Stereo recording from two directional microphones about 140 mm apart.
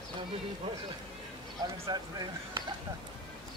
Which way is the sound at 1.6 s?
25° right (ahead or behind).